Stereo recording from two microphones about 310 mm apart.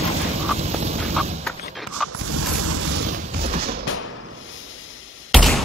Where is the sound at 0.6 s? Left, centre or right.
Right.